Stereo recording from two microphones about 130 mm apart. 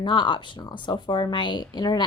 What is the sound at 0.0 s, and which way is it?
A woman's voice, 35° left (ahead or behind).